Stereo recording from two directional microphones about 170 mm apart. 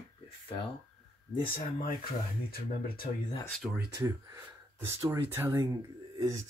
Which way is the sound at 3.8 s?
25° right (ahead or behind).